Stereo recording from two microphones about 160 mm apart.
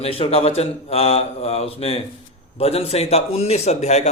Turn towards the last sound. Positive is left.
turn(degrees=45)  # may be behind; listen again after turning